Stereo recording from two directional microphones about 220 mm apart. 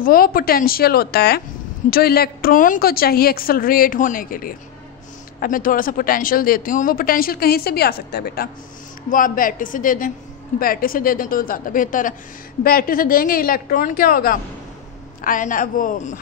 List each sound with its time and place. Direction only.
0.0 s speech: 40° left (ahead or behind)